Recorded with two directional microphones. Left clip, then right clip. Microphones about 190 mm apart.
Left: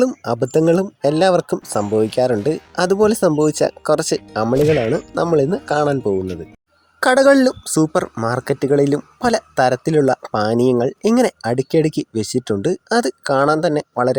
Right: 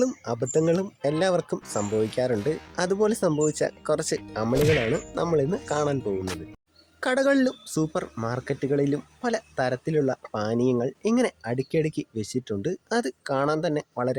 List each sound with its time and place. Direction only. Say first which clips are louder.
0.0 s speech: left 8 dB; 35° left (ahead or behind)
1.8 s speech: left 8 dB; centre (ahead or behind)
2.0 s speech: left 9 dB; 35° left (ahead or behind)
4.5 s speech: left 7 dB; centre (ahead or behind)
5.1 s speech: left 10 dB; 35° left (ahead or behind)
7.0 s speech: left 11 dB; 40° left (ahead or behind)